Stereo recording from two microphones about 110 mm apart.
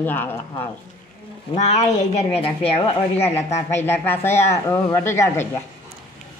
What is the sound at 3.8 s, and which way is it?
A man's voice, 20° left (ahead or behind).